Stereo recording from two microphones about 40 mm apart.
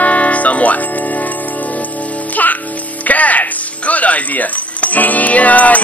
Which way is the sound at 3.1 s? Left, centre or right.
Left.